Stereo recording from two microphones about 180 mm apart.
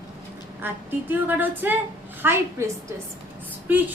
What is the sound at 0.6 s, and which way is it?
A woman's voice, 10° right (ahead or behind).